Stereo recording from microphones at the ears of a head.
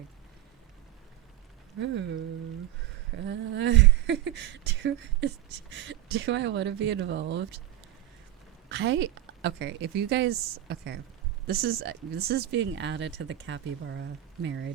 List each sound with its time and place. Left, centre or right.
1.7 s speech: right
8.7 s speech: right